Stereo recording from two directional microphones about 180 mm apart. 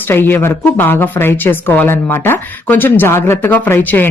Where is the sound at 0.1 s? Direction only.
10° left (ahead or behind).